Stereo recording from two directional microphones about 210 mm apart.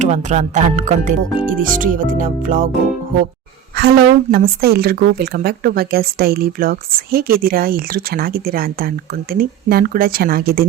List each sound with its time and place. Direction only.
0.0 s speech: 35° right (ahead or behind)
3.8 s a woman's voice: 45° right (ahead or behind)